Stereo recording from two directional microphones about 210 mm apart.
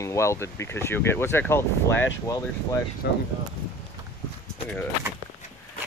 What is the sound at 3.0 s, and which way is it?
Speech, 50° left (ahead or behind).